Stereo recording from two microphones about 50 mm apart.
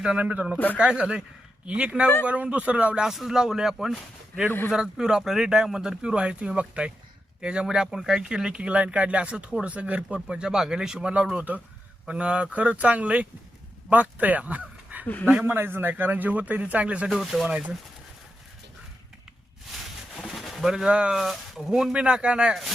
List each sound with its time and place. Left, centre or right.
0.2 s speech: right
0.8 s speech: centre
1.6 s speech: right
3.1 s speech: centre; by 15.0 s right
15.0 s speech: left
15.4 s a man's voice: right
17.1 s speech: centre
19.7 s a sound: centre
20.7 s speech: centre
21.2 s speech: centre
21.9 s speech: right